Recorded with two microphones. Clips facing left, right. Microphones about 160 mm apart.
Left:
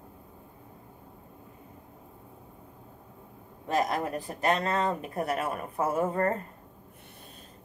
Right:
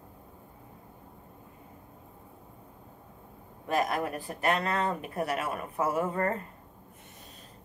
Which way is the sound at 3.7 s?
35° left (ahead or behind).